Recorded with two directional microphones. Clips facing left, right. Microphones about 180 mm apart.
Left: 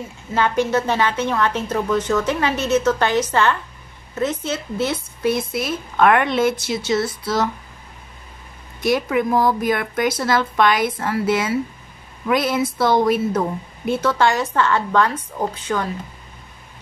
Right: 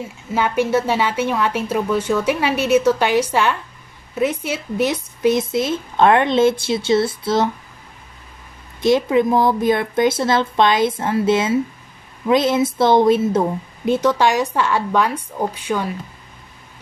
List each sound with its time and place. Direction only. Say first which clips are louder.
0.3 s a woman's voice: right 1 dB; 5° right (ahead or behind); by 7.4 s 25° right (ahead or behind)
8.8 s a woman's voice: right 4 dB; 25° right (ahead or behind)